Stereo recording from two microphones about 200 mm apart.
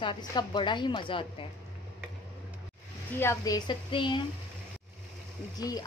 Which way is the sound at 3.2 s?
15° left (ahead or behind).